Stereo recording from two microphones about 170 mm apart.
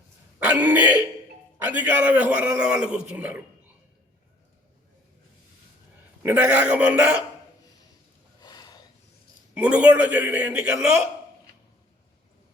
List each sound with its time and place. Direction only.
0.6 s throat clearing: 10° right (ahead or behind)
1.6 s a man's voice: 10° right (ahead or behind)
6.2 s a man's voice: 10° right (ahead or behind)
8.4 s a sound: 25° left (ahead or behind)
9.6 s a man's voice: 5° right (ahead or behind)